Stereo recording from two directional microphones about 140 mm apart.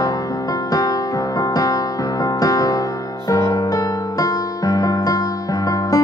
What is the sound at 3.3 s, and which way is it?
Music, 25° left (ahead or behind).